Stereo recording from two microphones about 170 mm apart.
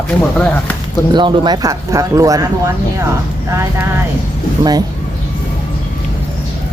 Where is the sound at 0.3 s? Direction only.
5° left (ahead or behind).